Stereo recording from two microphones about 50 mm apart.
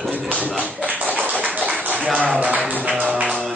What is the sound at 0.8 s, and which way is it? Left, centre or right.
Tap, right.